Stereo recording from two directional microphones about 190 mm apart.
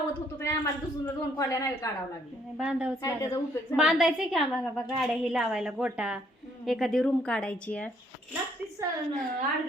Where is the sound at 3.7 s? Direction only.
5° right (ahead or behind).